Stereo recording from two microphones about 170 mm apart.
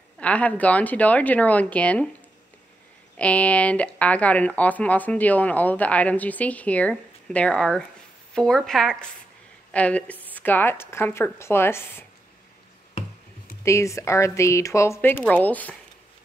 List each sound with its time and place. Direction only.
0.2 s speech: 10° left (ahead or behind)
3.2 s speech: 10° left (ahead or behind)
13.7 s speech: 15° left (ahead or behind)